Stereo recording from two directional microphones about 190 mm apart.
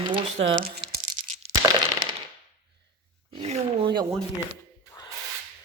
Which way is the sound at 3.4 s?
30° right (ahead or behind).